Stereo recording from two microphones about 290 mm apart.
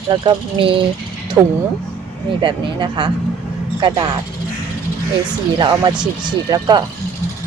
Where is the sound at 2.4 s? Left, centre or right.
Centre.